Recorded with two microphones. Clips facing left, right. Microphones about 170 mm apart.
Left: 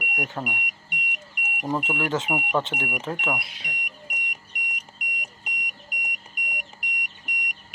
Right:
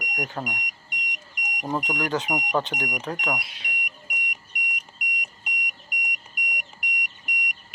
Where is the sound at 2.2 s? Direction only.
5° left (ahead or behind).